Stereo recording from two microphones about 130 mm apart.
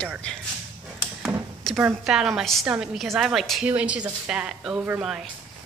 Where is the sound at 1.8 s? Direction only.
5° right (ahead or behind).